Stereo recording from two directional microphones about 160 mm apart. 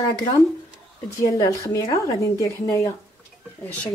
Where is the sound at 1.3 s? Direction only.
20° left (ahead or behind).